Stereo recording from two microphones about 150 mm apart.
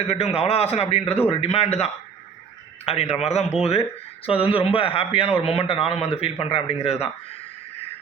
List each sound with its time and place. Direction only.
0.1 s a man's voice: 45° left (ahead or behind)